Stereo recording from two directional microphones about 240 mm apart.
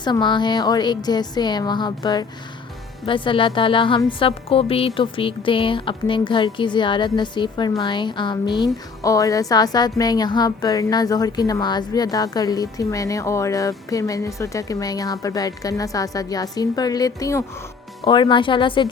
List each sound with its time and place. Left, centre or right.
0.0 s a woman's voice: centre